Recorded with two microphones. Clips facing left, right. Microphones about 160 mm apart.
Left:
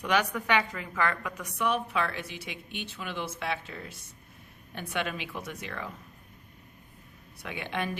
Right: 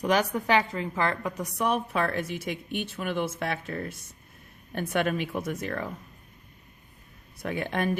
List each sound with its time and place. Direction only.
0.0 s a woman's voice: 40° right (ahead or behind)
7.3 s a woman's voice: 45° right (ahead or behind)